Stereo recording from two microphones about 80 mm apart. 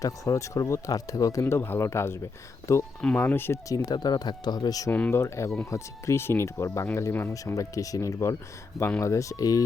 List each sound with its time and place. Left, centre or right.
0.0 s speech: left
3.2 s speech: left
3.7 s speech: left
3.9 s speech: left
4.9 s speech: centre
5.1 s speech: left
7.5 s speech: left